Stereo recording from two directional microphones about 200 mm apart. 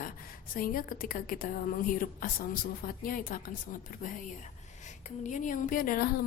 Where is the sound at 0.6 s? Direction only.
45° left (ahead or behind).